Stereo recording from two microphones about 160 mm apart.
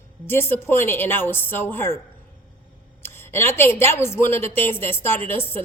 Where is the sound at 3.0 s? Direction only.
15° left (ahead or behind).